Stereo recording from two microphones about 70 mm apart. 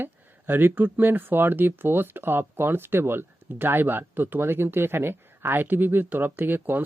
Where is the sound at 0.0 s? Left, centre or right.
Right.